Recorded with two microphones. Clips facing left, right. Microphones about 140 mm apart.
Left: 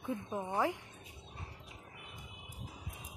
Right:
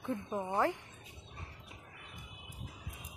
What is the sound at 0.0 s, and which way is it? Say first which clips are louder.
Speech: right 1 dB; centre (ahead or behind).